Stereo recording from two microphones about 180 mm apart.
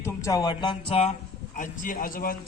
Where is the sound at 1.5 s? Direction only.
45° left (ahead or behind).